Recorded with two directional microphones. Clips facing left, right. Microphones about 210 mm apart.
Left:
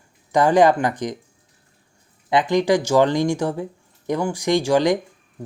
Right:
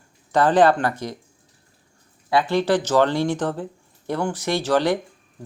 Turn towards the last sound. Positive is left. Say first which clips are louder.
# left 3 dB
turn(degrees=15)  # may be behind; listen again after turning